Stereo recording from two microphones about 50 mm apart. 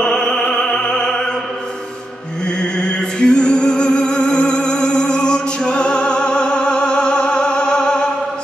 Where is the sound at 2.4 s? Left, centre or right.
Centre.